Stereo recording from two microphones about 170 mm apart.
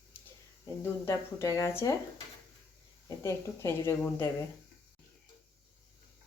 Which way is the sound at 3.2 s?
15° left (ahead or behind).